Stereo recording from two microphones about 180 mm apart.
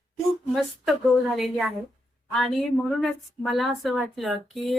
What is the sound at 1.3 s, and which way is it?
Speech, centre (ahead or behind).